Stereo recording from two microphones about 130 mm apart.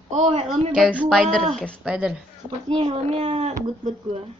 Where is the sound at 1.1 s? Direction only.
5° left (ahead or behind).